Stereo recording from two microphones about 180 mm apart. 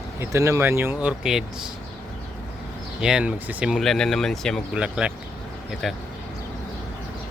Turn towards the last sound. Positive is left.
turn(degrees=0)  # may be behind; listen again after turning